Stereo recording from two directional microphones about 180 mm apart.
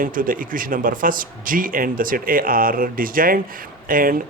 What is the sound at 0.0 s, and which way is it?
A man's voice, 50° right (ahead or behind).